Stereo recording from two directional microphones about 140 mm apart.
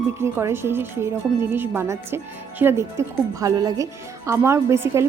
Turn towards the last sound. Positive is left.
turn(degrees=-20)  # may be behind; listen again after turning